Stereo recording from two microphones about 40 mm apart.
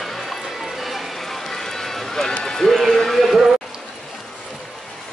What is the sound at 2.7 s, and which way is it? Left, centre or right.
Speech, centre.